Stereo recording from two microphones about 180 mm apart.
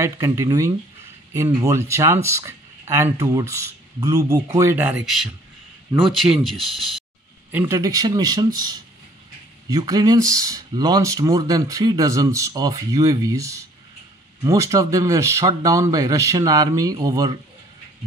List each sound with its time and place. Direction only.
0.0 s speech: 15° right (ahead or behind)
6.2 s speech: 5° right (ahead or behind)
7.5 s speech: 15° right (ahead or behind)